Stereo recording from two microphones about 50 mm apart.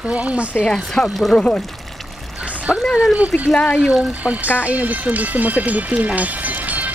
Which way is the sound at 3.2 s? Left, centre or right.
Right.